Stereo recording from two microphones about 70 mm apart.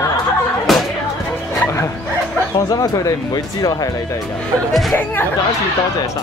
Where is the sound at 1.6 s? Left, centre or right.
Left.